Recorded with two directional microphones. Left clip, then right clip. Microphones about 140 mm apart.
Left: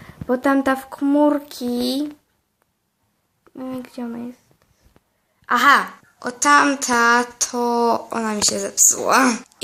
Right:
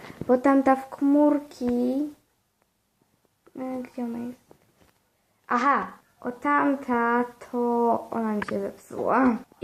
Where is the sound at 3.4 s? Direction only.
15° left (ahead or behind).